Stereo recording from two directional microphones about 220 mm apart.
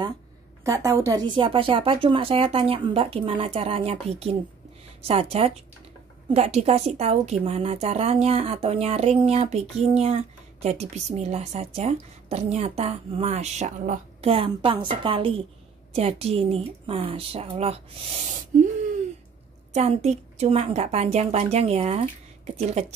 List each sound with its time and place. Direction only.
0.7 s a woman's voice: 15° right (ahead or behind)
19.7 s a woman's voice: 30° right (ahead or behind)